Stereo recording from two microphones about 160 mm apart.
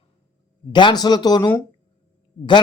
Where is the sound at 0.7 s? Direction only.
25° left (ahead or behind).